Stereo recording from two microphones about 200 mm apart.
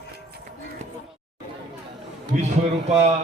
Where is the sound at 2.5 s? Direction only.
35° right (ahead or behind).